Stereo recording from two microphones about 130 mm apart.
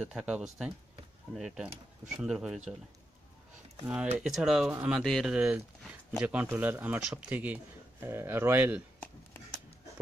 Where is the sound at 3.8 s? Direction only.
10° right (ahead or behind).